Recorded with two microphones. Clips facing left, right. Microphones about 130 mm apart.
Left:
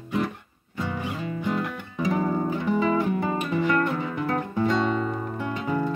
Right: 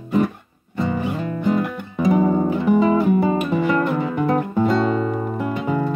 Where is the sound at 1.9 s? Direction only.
20° right (ahead or behind).